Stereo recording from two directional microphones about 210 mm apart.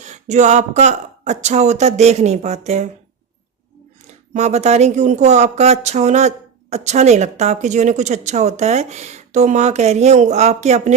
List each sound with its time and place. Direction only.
0.0 s speech: 35° right (ahead or behind)
4.0 s speech: 30° right (ahead or behind)